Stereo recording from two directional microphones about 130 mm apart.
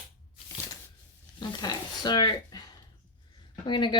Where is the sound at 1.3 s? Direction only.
30° left (ahead or behind).